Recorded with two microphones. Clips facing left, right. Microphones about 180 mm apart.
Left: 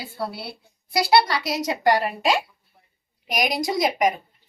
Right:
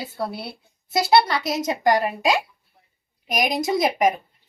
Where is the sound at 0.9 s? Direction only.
25° right (ahead or behind).